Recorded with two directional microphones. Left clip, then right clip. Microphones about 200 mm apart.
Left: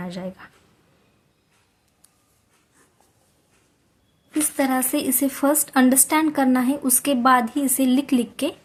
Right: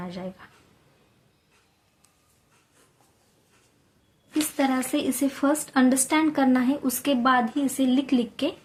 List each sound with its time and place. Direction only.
0.0 s speech: 25° left (ahead or behind)
4.4 s speech: 20° left (ahead or behind)